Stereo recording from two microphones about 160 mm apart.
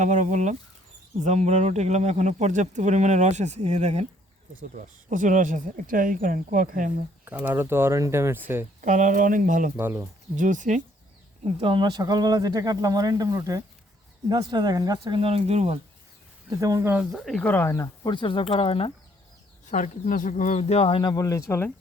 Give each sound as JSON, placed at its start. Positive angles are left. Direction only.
{"t": 0.0, "sound": "speech", "side_deg": -50}
{"t": 7.3, "sound": "speech", "side_deg": -10}
{"t": 8.8, "sound": "speech", "side_deg": -55}
{"t": 9.7, "sound": "speech", "side_deg": -15}
{"t": 10.3, "sound": "speech", "side_deg": -55}
{"t": 11.4, "sound": "speech", "side_deg": -35}
{"t": 16.6, "sound": "speech", "side_deg": -20}
{"t": 17.1, "sound": "speech", "side_deg": 5}
{"t": 19.6, "sound": "speech", "side_deg": 50}